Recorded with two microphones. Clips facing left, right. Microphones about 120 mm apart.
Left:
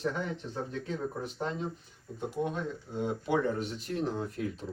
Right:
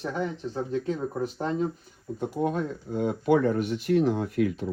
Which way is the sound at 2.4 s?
45° right (ahead or behind).